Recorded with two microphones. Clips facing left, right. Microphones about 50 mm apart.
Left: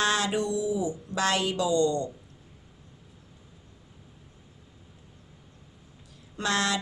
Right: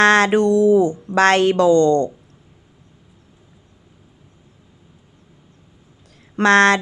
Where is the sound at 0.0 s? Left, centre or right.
Right.